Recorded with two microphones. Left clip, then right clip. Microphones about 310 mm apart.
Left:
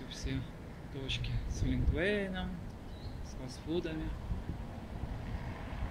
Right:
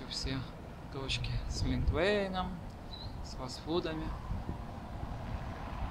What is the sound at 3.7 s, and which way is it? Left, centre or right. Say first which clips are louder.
Speech: right 2 dB; right.